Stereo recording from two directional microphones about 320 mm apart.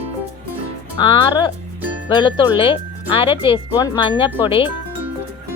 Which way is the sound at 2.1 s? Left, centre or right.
Centre.